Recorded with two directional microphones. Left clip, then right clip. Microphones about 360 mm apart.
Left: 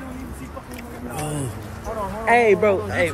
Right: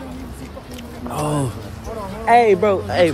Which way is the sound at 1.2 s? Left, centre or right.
Centre.